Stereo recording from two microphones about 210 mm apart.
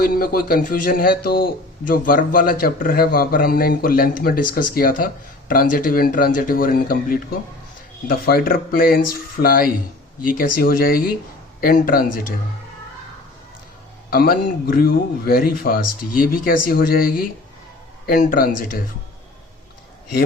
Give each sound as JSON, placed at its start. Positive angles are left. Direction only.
{"t": 0.0, "sound": "a man's voice", "side_deg": 45}
{"t": 14.1, "sound": "a man's voice", "side_deg": 45}